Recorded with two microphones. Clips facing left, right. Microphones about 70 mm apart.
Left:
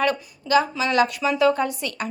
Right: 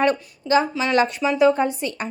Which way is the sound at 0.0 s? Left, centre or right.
Right.